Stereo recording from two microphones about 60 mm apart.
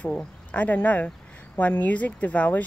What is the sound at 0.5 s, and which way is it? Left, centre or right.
Speech, left.